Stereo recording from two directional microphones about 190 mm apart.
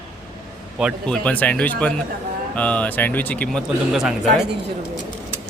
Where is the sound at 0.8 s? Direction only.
Centre (ahead or behind).